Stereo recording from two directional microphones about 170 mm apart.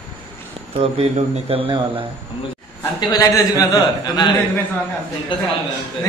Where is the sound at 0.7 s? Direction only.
35° right (ahead or behind).